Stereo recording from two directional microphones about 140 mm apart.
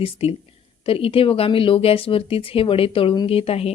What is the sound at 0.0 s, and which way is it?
Speech, 45° left (ahead or behind).